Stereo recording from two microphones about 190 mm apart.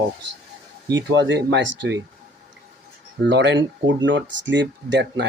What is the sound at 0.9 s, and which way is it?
Speech, 70° right (ahead or behind).